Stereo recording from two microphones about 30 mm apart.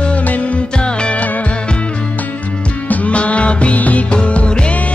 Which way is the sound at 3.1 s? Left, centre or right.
Left.